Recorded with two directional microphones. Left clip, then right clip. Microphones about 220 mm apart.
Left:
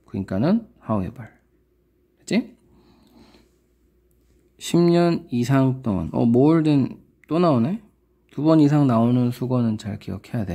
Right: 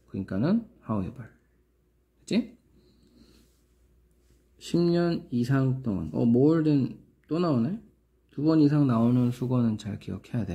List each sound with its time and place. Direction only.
0.0 s speech: 30° left (ahead or behind)
4.6 s speech: 35° left (ahead or behind)